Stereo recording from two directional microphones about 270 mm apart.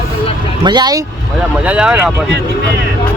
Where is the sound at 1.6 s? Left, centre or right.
Centre.